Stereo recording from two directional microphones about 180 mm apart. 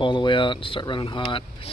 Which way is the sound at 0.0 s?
25° left (ahead or behind).